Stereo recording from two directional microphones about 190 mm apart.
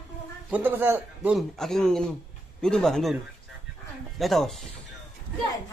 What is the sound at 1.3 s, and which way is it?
Speech, centre (ahead or behind).